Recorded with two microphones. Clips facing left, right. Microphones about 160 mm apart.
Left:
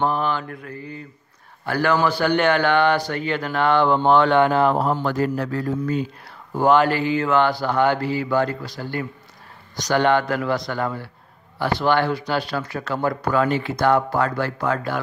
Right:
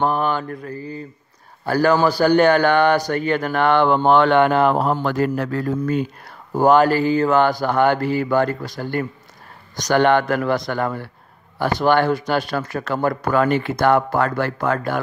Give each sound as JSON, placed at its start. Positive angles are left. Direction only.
{"t": 0.0, "sound": "mantra", "side_deg": -50}
{"t": 1.7, "sound": "speech", "side_deg": -40}
{"t": 6.5, "sound": "speech", "side_deg": -45}